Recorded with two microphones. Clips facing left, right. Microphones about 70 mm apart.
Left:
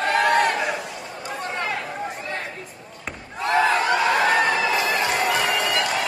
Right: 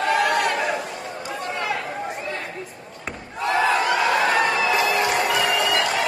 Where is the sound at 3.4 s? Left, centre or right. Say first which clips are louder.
Even; left.